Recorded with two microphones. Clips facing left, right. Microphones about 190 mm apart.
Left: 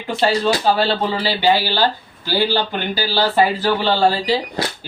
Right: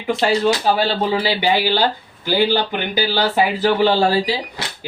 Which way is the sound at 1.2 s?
15° right (ahead or behind).